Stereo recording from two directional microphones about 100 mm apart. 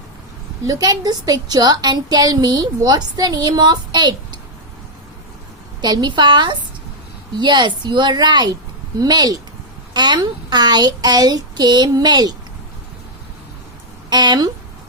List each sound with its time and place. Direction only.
0.6 s a woman's voice: 40° right (ahead or behind)
5.8 s a woman's voice: 45° right (ahead or behind)
14.1 s speech: 45° right (ahead or behind)